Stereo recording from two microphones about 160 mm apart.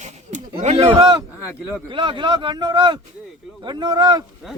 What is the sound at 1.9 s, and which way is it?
Speech, 30° right (ahead or behind).